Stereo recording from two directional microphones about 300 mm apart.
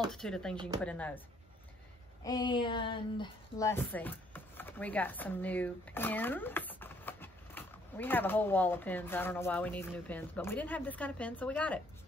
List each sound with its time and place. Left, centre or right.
0.1 s speech: centre
2.2 s speech: centre